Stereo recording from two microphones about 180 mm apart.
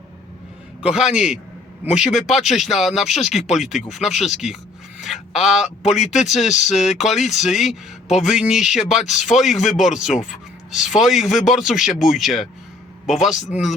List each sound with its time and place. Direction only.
0.8 s speech: 5° right (ahead or behind)
6.5 s speech: 40° left (ahead or behind)
6.8 s speech: centre (ahead or behind)